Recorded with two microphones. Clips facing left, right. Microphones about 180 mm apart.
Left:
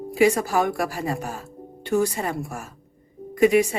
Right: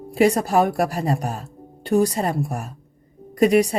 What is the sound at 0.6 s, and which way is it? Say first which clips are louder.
Speech: right 4 dB; 35° right (ahead or behind).